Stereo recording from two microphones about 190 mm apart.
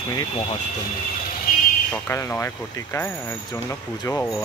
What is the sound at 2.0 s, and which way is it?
Speech, 15° left (ahead or behind).